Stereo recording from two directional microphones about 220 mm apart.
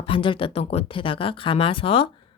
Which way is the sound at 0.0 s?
25° left (ahead or behind).